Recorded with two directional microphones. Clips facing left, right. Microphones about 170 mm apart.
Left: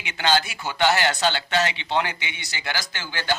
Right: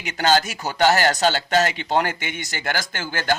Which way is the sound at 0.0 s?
40° right (ahead or behind).